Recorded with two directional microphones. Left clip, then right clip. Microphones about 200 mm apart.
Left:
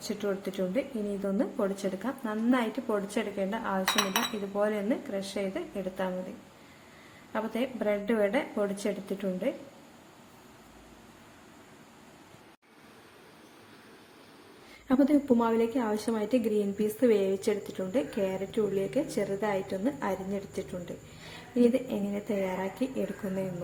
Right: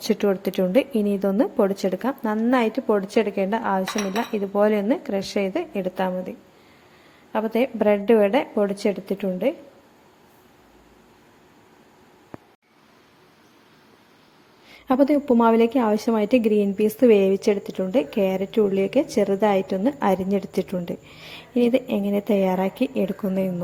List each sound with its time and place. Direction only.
0.2 s a woman's voice: 35° right (ahead or behind)
7.3 s a woman's voice: 30° right (ahead or behind)
14.8 s a woman's voice: 30° right (ahead or behind)